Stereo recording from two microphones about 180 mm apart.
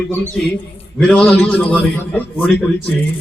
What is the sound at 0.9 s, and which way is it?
A man's voice, 5° left (ahead or behind).